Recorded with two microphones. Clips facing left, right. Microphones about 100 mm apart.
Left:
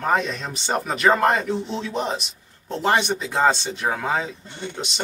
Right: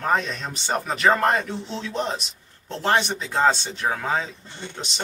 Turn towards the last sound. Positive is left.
turn(degrees=5)  # may be behind; listen again after turning